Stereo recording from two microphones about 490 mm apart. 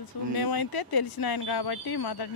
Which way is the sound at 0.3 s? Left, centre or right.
Left.